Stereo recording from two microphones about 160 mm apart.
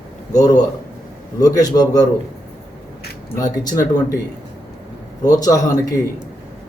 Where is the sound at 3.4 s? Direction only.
25° left (ahead or behind).